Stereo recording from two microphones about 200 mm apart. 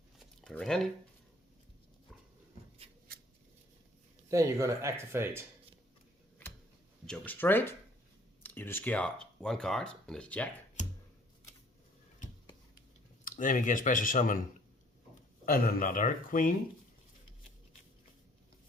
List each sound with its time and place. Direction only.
0.2 s a sound: 5° left (ahead or behind)
4.3 s speech: 15° right (ahead or behind)
7.1 s speech: 10° left (ahead or behind)
10.8 s music: 35° left (ahead or behind)
13.2 s speech: 40° left (ahead or behind)
15.4 s speech: 45° left (ahead or behind)